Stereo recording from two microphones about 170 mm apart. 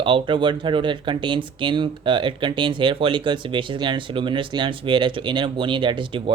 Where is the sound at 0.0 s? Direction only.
30° right (ahead or behind).